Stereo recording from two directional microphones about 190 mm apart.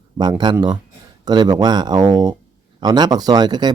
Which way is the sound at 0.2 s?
25° right (ahead or behind).